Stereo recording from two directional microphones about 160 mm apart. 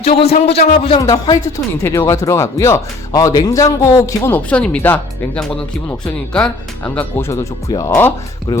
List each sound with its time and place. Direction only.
0.0 s speech: 40° left (ahead or behind)
0.4 s a man's voice: 90° left
0.7 s speech: 35° left (ahead or behind)
1.0 s speech: 25° left (ahead or behind)